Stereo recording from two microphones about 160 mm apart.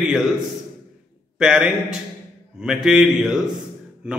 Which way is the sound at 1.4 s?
5° right (ahead or behind).